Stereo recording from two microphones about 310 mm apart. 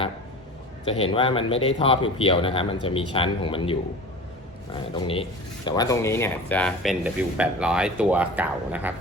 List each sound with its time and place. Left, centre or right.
0.9 s speech: centre